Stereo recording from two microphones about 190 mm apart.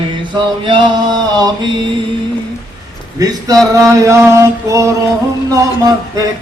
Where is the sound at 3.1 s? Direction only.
20° right (ahead or behind).